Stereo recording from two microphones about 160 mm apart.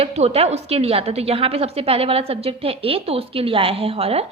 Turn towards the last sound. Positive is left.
turn(degrees=-40)  # may be behind; listen again after turning